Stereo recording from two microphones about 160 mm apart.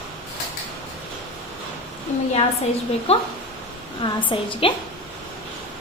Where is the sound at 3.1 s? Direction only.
40° left (ahead or behind).